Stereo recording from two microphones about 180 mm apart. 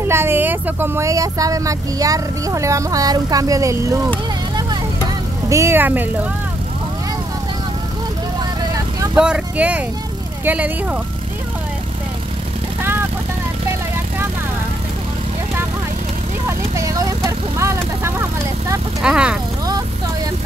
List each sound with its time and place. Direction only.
0.1 s speech: 15° right (ahead or behind)
5.5 s speech: 15° right (ahead or behind)
9.1 s speech: 5° right (ahead or behind)
16.4 s vehicle: 15° right (ahead or behind)
18.9 s speech: 5° right (ahead or behind)